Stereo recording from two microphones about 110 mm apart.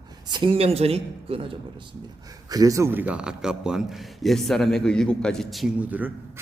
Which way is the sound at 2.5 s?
30° right (ahead or behind).